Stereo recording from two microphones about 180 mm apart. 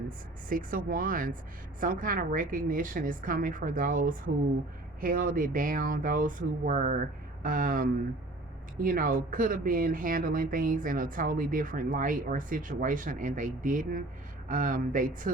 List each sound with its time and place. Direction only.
0.4 s speech: 50° right (ahead or behind)